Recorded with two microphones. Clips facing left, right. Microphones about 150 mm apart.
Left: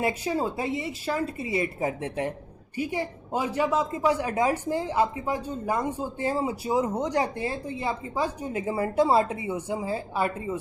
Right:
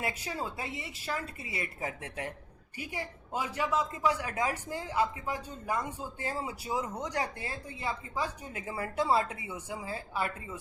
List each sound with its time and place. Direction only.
0.0 s a woman's voice: 25° left (ahead or behind)